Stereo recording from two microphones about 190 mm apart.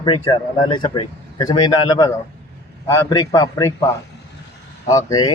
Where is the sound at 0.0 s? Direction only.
25° left (ahead or behind).